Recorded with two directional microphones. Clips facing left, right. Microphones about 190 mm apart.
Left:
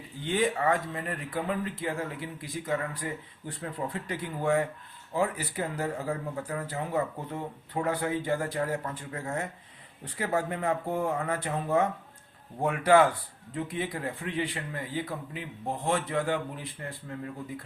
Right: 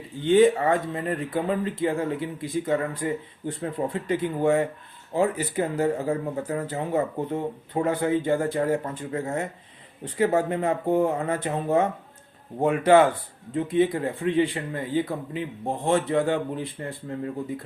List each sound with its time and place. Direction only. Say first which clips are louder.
0.3 s speech: right 9 dB; 25° right (ahead or behind)